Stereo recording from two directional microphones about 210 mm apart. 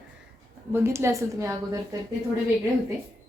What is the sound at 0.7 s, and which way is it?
A woman's voice, 10° right (ahead or behind).